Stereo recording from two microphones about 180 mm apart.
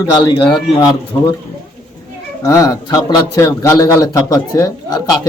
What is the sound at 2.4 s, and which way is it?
A man's voice, 20° left (ahead or behind).